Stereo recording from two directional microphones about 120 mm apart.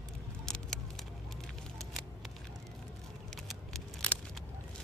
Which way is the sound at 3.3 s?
5° left (ahead or behind).